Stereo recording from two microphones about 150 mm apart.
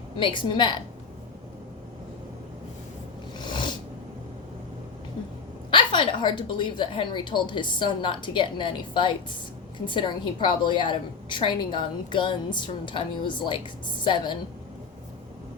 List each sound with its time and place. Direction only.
0.2 s a woman's voice: 35° left (ahead or behind)
3.3 s a sound: 30° left (ahead or behind)
5.7 s a woman's voice: 35° left (ahead or behind)